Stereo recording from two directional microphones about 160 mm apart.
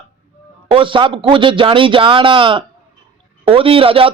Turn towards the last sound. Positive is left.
turn(degrees=-35)  # may be behind; listen again after turning